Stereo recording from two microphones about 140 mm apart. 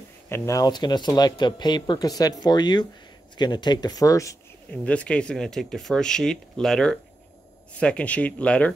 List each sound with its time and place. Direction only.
0.3 s speech: 25° left (ahead or behind)
4.8 s speech: 10° left (ahead or behind)